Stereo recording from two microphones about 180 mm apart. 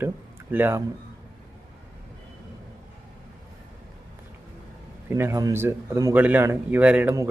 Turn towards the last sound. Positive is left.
turn(degrees=-10)  # may be behind; listen again after turning